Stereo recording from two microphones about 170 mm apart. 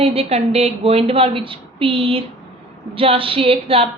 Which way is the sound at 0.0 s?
35° right (ahead or behind).